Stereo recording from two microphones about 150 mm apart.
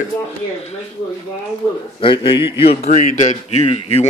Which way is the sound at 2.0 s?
35° left (ahead or behind).